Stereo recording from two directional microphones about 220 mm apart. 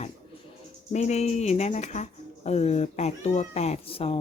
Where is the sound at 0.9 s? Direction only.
30° left (ahead or behind).